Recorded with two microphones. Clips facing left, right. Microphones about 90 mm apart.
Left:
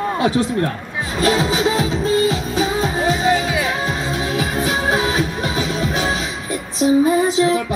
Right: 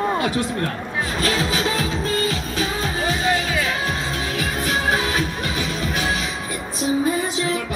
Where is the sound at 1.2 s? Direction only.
35° left (ahead or behind).